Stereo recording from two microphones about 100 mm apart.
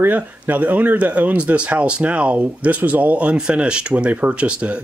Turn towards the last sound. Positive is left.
turn(degrees=-10)  # may be behind; listen again after turning